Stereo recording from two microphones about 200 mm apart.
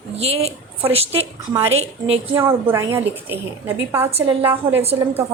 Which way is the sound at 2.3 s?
15° right (ahead or behind).